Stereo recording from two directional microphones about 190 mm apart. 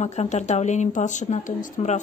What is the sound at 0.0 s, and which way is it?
A woman's voice, 35° left (ahead or behind).